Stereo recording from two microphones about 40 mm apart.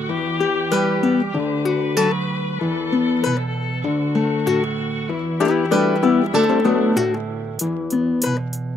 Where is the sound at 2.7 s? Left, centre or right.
Right.